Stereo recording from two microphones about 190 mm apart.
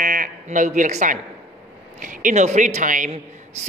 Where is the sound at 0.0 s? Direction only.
45° right (ahead or behind).